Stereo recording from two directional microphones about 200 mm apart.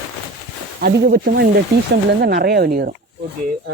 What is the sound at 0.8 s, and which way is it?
Speech, 50° right (ahead or behind).